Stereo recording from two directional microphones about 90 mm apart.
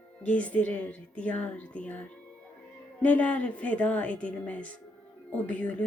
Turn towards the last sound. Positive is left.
turn(degrees=15)  # may be behind; listen again after turning